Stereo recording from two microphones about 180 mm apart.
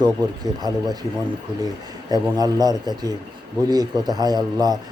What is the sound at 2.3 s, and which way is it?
Speech, 20° right (ahead or behind).